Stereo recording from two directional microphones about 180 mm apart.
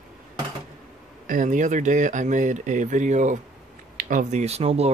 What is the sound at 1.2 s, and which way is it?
Speech, 45° right (ahead or behind).